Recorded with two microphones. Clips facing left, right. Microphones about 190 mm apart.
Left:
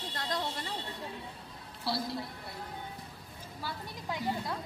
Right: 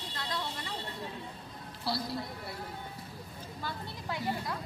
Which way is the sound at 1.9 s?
Centre (ahead or behind).